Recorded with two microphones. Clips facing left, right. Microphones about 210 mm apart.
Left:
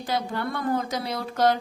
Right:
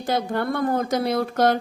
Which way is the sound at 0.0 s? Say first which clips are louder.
Right 4 dB; 50° right (ahead or behind).